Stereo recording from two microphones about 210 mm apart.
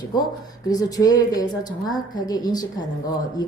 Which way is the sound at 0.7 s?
15° left (ahead or behind).